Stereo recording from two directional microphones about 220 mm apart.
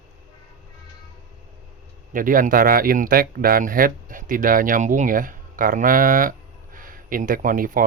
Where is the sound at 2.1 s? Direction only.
40° right (ahead or behind).